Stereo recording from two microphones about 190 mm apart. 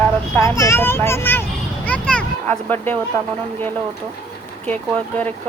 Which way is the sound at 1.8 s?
5° left (ahead or behind).